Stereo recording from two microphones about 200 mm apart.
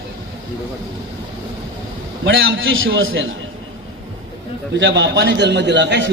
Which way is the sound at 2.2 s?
70° right (ahead or behind).